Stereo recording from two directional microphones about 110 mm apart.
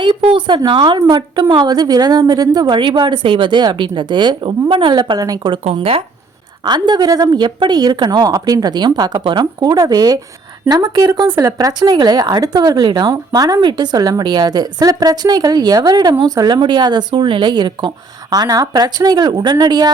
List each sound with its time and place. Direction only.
0.0 s a woman's voice: 55° right (ahead or behind); by 5.5 s 40° right (ahead or behind)
5.7 s speech: 60° right (ahead or behind)
6.7 s a woman's voice: 40° right (ahead or behind)